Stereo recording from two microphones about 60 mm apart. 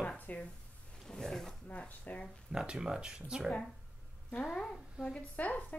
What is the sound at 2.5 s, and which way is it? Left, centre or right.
Speech, centre.